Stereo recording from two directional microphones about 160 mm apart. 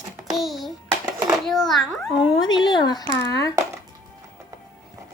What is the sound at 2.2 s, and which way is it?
Speech, 30° left (ahead or behind).